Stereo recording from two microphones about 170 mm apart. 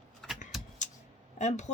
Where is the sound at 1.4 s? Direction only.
40° left (ahead or behind).